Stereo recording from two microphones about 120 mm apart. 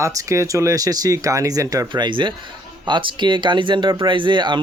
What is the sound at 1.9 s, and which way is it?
Speech, 40° right (ahead or behind).